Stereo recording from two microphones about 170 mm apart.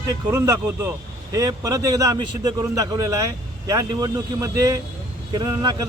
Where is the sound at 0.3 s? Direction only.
20° right (ahead or behind).